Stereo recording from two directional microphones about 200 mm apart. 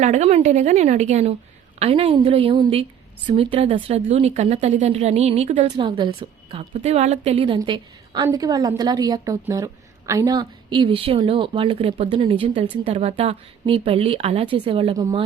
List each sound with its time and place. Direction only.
0.0 s a woman's voice: 35° right (ahead or behind)